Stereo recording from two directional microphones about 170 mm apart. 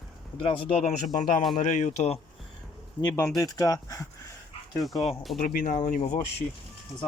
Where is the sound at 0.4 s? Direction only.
35° left (ahead or behind).